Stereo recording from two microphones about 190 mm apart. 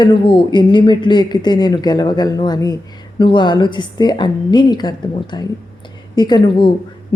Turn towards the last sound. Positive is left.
turn(degrees=25)  # may be behind; listen again after turning